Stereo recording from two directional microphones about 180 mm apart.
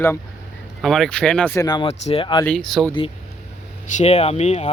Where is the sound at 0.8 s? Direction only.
Centre (ahead or behind).